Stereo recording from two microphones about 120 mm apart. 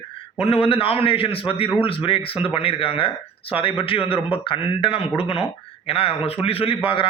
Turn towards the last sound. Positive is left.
turn(degrees=45)  # may be behind; listen again after turning